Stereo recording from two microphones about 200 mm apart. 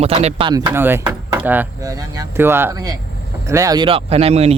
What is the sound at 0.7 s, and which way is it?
Speech, 10° right (ahead or behind).